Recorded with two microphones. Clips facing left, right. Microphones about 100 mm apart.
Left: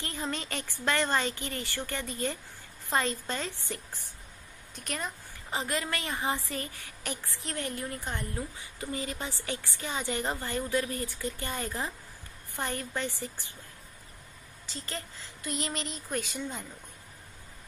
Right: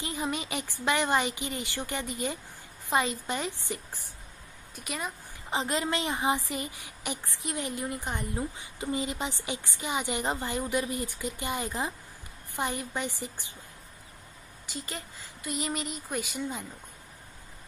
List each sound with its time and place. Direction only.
0.0 s a woman's voice: 15° right (ahead or behind)
5.5 s a woman's voice: 20° right (ahead or behind)
14.7 s a woman's voice: 10° right (ahead or behind)